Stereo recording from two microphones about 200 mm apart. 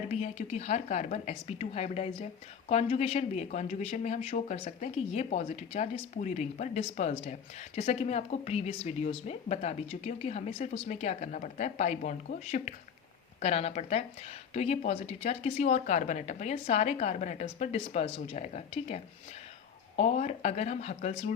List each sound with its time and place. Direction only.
0.1 s speech: 35° left (ahead or behind)